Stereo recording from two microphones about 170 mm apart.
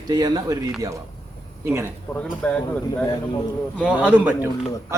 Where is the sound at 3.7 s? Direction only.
5° right (ahead or behind).